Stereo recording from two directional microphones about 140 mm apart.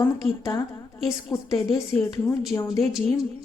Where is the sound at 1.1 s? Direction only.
20° left (ahead or behind).